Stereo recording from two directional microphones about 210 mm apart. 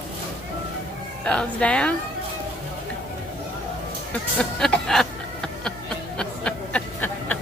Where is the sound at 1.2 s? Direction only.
5° left (ahead or behind).